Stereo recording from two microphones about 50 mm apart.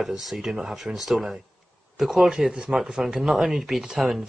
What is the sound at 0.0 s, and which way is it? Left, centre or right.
Speech, centre.